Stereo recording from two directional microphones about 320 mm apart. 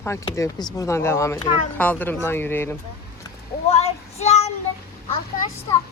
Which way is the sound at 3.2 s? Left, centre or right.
Centre.